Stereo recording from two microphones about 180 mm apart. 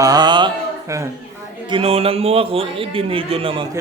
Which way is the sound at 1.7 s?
35° right (ahead or behind).